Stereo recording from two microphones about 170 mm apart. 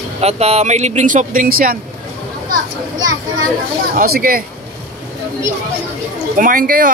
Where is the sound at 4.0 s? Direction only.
60° right (ahead or behind).